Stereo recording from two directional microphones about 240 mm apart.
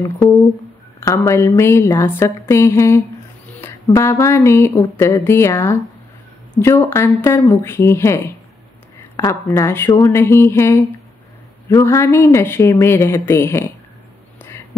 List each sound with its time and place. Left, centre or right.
1.0 s speech: centre